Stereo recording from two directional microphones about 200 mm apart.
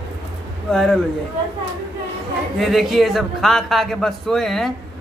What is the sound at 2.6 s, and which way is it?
A man's voice, centre (ahead or behind).